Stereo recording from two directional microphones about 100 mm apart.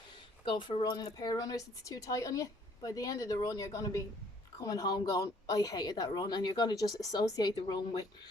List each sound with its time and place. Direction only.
0.5 s speech: 55° left (ahead or behind)
0.9 s a woman's voice: 40° left (ahead or behind)